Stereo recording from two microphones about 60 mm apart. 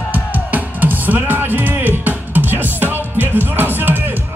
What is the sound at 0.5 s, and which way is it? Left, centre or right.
Music, right.